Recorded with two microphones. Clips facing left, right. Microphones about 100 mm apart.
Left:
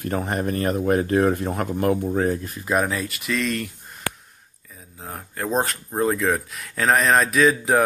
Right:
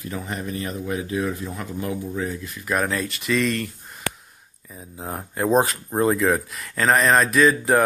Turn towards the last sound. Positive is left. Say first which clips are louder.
# right 1 dB
turn(degrees=0)  # may be behind; listen again after turning